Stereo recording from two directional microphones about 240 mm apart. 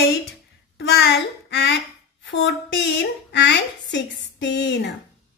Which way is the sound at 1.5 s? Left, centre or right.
Left.